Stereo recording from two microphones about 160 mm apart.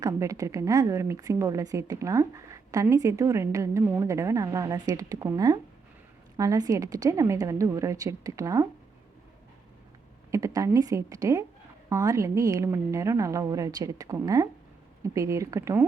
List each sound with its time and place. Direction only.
0.0 s a woman's voice: 20° right (ahead or behind)
10.3 s a woman's voice: 20° right (ahead or behind)